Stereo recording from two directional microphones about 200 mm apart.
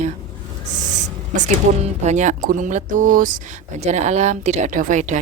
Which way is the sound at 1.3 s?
35° right (ahead or behind).